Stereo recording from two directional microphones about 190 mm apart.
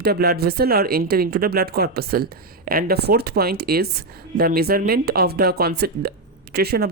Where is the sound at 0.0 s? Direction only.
55° right (ahead or behind).